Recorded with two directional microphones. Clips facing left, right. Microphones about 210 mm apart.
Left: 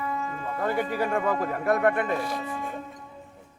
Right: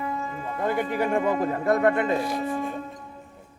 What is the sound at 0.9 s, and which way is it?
Speech, 15° right (ahead or behind).